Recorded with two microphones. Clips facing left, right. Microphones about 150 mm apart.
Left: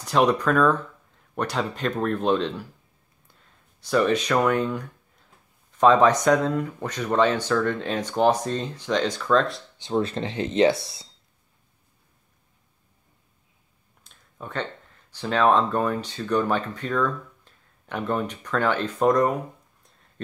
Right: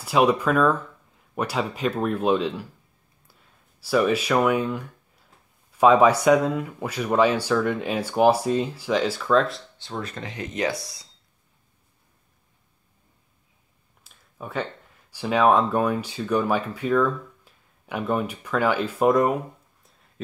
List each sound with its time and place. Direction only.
0.0 s speech: 5° right (ahead or behind)
9.8 s speech: 25° left (ahead or behind)
14.0 s speech: 10° right (ahead or behind)